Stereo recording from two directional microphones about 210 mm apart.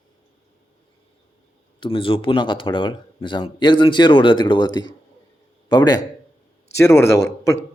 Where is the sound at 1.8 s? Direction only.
25° left (ahead or behind).